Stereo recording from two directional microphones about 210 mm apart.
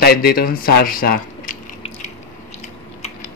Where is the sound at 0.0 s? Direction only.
45° left (ahead or behind).